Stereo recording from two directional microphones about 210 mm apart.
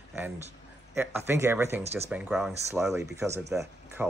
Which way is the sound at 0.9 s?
10° right (ahead or behind).